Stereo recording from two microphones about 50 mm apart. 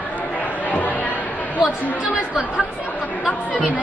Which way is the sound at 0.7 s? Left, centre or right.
Left.